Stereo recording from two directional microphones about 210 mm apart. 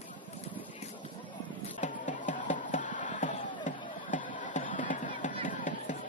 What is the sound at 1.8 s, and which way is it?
Music, 35° left (ahead or behind).